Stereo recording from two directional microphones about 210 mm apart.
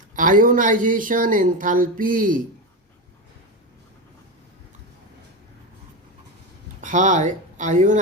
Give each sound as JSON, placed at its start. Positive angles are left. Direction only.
{"t": 0.2, "sound": "speech", "side_deg": -40}
{"t": 6.8, "sound": "speech", "side_deg": -35}